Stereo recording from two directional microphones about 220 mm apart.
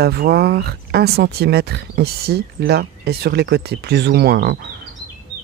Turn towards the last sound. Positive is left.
turn(degrees=-45)  # may be behind; listen again after turning